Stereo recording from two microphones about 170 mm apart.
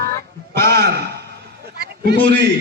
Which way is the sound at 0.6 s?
70° right (ahead or behind).